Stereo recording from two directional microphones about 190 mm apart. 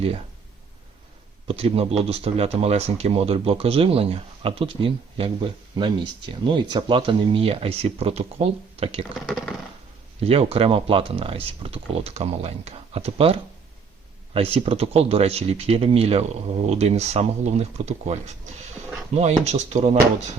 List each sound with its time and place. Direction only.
1.5 s speech: 30° right (ahead or behind)
9.1 s speech: centre (ahead or behind)
10.2 s speech: 30° right (ahead or behind)